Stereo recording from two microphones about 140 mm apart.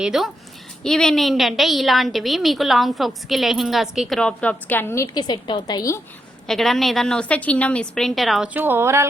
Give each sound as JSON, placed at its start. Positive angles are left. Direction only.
{"t": 0.0, "sound": "a woman's voice", "side_deg": -5}
{"t": 5.1, "sound": "a woman's voice", "side_deg": 30}
{"t": 6.5, "sound": "a woman's voice", "side_deg": 0}
{"t": 8.5, "sound": "a woman's voice", "side_deg": -15}